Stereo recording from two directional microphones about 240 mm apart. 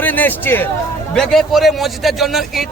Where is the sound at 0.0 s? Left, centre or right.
Centre.